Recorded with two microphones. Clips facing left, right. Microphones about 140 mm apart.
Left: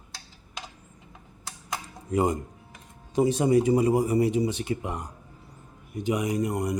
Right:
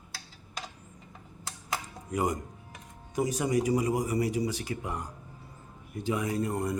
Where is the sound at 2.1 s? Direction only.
25° left (ahead or behind).